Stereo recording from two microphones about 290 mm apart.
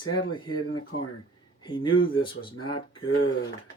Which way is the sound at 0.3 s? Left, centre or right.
Centre.